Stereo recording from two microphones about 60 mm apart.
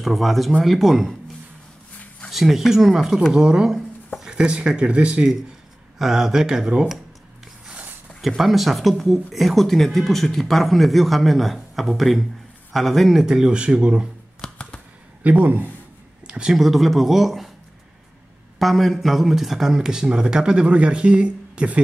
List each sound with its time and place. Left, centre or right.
0.0 s speech: centre
2.0 s a sound: centre
2.3 s speech: centre
5.9 s speech: centre
8.4 s speech: centre
14.4 s typing: centre
15.2 s a man's voice: right
16.3 s speech: centre
18.6 s speech: centre